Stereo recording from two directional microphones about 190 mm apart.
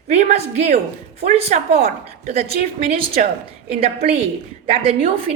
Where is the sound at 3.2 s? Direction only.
40° right (ahead or behind).